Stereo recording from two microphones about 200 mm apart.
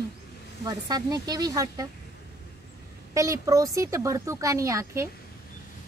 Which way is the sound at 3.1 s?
15° right (ahead or behind).